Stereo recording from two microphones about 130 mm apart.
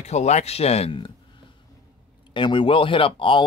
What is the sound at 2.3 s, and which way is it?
Speech, 40° left (ahead or behind).